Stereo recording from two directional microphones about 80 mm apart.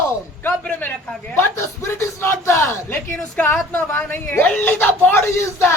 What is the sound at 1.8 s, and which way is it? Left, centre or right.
A woman's voice, left.